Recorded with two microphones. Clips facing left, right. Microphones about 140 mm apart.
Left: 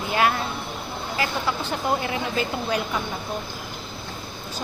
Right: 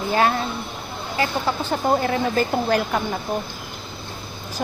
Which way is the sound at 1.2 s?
30° right (ahead or behind).